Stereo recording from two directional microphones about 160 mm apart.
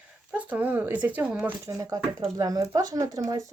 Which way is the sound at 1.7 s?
20° right (ahead or behind).